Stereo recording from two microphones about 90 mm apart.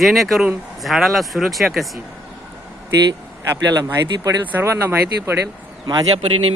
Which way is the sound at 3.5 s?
35° right (ahead or behind).